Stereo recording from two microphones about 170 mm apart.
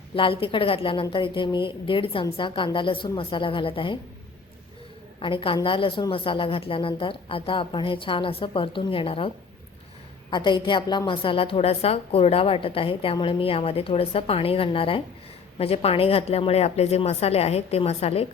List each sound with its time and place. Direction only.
0.1 s a woman's voice: 30° left (ahead or behind)
5.2 s a woman's voice: 30° left (ahead or behind)